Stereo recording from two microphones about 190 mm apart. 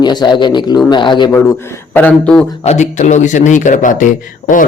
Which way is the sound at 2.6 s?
40° left (ahead or behind).